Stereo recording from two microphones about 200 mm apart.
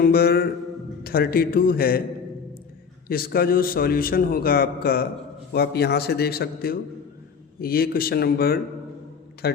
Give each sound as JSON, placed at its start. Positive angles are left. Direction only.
{"t": 0.0, "sound": "a man's voice", "side_deg": 50}
{"t": 3.1, "sound": "a man's voice", "side_deg": 50}